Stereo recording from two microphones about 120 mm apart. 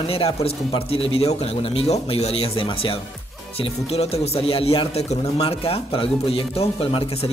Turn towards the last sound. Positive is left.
turn(degrees=55)  # may be behind; listen again after turning